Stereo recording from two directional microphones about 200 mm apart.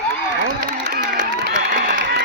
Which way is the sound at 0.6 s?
45° right (ahead or behind).